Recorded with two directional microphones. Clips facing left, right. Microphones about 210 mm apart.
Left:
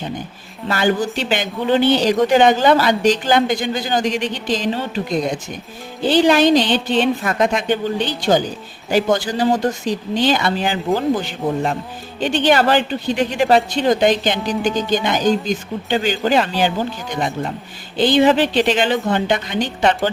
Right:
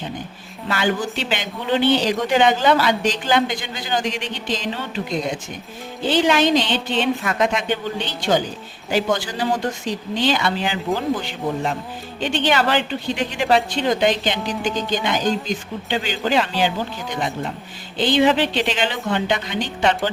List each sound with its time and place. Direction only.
0.7 s speech: 40° left (ahead or behind)
6.1 s a woman's voice: 35° left (ahead or behind)
17.9 s a woman's voice: 40° left (ahead or behind)